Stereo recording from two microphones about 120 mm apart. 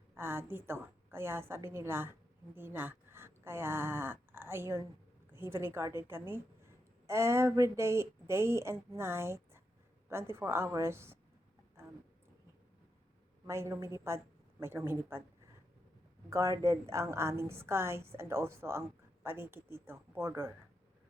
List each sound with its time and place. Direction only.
0.1 s a woman's voice: 20° right (ahead or behind)
13.5 s a woman's voice: 25° right (ahead or behind)
16.3 s a woman's voice: 25° right (ahead or behind)